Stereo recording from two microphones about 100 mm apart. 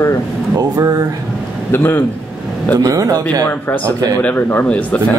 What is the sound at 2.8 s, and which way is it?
Speech, 35° right (ahead or behind).